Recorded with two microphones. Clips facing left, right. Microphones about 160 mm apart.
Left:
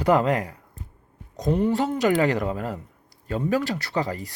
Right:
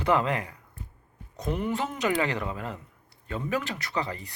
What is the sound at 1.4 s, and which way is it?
Speech, 35° left (ahead or behind).